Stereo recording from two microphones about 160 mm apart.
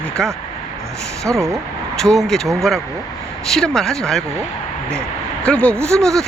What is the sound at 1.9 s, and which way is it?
Speech, centre (ahead or behind).